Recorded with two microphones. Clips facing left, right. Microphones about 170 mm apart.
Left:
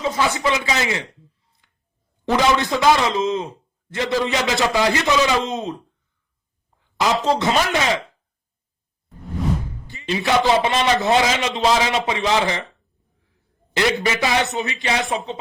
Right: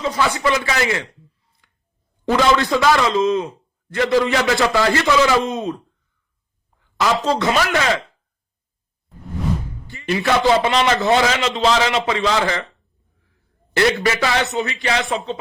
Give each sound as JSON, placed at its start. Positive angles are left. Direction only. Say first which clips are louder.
{"t": 0.0, "sound": "a man's voice", "louder": "right 1 dB", "side_deg": 25}
{"t": 2.3, "sound": "a man's voice", "louder": "right 2 dB", "side_deg": 20}
{"t": 7.0, "sound": "a man's voice", "louder": "right 1 dB", "side_deg": 20}
{"t": 10.0, "sound": "a man's voice", "louder": "right 1 dB", "side_deg": 20}
{"t": 13.7, "sound": "a man's voice", "louder": "right 3 dB", "side_deg": 15}